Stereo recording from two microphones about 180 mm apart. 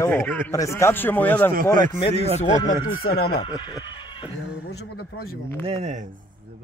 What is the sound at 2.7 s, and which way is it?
Speech, 55° left (ahead or behind).